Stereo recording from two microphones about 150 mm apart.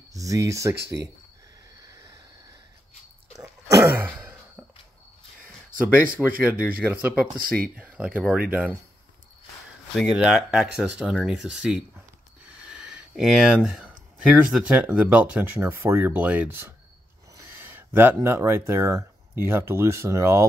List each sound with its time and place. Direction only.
0.1 s speech: 20° right (ahead or behind)
1.8 s a sound: 20° right (ahead or behind)
3.3 s a sound: 20° right (ahead or behind)
6.4 s speech: 10° right (ahead or behind)
7.4 s speech: 75° right (ahead or behind)
7.9 s speech: 5° right (ahead or behind)
9.9 s speech: 5° right (ahead or behind)
17.4 s a sound: 15° right (ahead or behind)
18.7 s speech: 20° right (ahead or behind)